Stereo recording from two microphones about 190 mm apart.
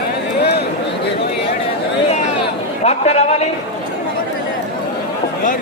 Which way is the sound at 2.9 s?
35° left (ahead or behind).